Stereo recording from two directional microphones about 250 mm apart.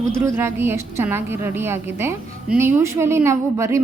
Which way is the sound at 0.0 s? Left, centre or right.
Centre.